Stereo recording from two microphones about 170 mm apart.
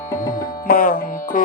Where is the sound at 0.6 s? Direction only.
55° left (ahead or behind).